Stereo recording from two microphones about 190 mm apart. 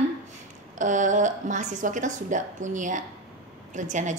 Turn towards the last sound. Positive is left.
turn(degrees=-40)  # may be behind; listen again after turning